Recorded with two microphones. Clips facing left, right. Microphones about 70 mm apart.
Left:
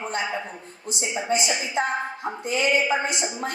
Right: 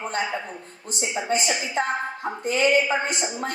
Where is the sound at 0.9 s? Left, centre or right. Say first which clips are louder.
Even; right.